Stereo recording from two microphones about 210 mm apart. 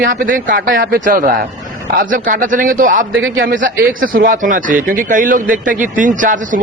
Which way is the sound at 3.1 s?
65° right (ahead or behind).